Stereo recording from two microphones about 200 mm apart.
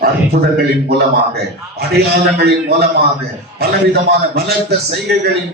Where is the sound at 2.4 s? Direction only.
55° right (ahead or behind).